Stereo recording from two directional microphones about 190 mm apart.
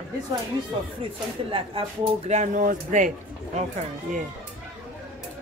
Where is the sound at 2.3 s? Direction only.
40° right (ahead or behind).